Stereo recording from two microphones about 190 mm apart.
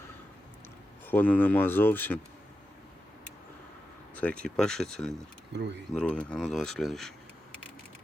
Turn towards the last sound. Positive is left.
turn(degrees=0)  # may be behind; listen again after turning